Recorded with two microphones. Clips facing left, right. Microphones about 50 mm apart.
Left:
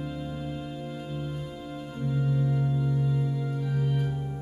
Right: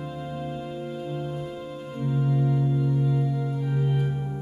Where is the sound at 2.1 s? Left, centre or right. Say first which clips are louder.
Right 3 dB; centre.